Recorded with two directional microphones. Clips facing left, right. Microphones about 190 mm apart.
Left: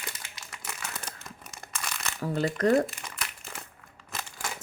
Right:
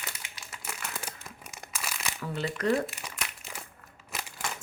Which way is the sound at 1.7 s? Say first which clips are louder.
Even; 5° right (ahead or behind).